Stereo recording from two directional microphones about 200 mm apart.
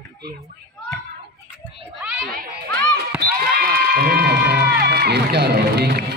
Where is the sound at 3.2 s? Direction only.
45° right (ahead or behind).